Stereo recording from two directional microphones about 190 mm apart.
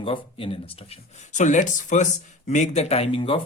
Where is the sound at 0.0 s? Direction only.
25° left (ahead or behind).